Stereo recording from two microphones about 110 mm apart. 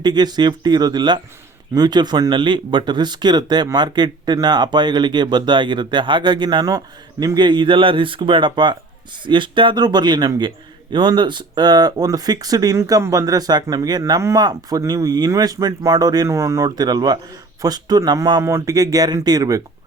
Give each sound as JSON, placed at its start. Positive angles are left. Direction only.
{"t": 0.0, "sound": "speech", "side_deg": -40}
{"t": 14.2, "sound": "speech", "side_deg": -25}
{"t": 16.6, "sound": "speech", "side_deg": -40}
{"t": 18.4, "sound": "speech", "side_deg": -30}